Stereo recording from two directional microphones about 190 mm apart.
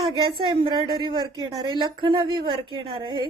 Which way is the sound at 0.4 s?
25° right (ahead or behind).